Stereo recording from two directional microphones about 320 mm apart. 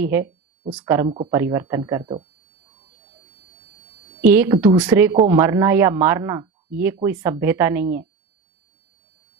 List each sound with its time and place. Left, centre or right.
0.0 s speech: centre
4.2 s speech: centre